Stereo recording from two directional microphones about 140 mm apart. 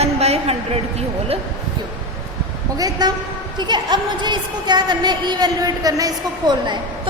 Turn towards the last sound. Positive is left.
turn(degrees=-30)  # may be behind; listen again after turning